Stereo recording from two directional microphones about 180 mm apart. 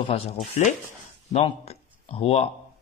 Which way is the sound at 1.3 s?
35° left (ahead or behind).